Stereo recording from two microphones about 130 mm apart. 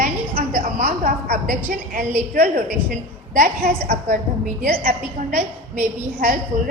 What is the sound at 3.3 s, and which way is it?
A woman's voice, 70° right (ahead or behind).